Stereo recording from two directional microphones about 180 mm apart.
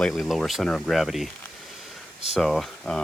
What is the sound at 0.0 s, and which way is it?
Speech, centre (ahead or behind).